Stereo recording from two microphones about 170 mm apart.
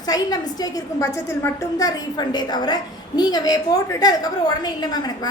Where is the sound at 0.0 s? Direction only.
25° left (ahead or behind).